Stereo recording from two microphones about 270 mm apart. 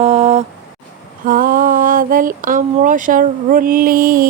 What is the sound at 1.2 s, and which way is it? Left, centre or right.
Speech, right.